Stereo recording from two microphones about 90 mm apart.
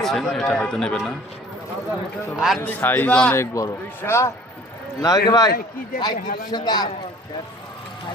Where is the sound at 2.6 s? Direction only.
20° left (ahead or behind).